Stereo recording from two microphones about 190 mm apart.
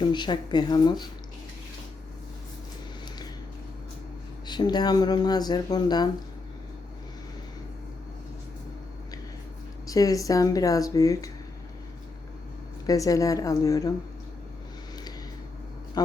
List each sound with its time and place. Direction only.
0.0 s speech: 25° left (ahead or behind)
4.4 s speech: 20° left (ahead or behind)
9.8 s speech: 20° left (ahead or behind)
12.8 s speech: 20° left (ahead or behind)
16.0 s a sound: 20° left (ahead or behind)